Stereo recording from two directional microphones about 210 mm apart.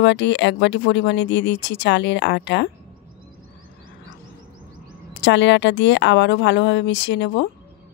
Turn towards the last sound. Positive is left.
turn(degrees=55)  # may be behind; listen again after turning